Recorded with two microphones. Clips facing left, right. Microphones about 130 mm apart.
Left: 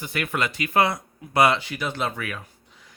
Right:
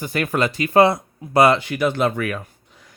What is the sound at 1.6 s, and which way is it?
Speech, 55° right (ahead or behind).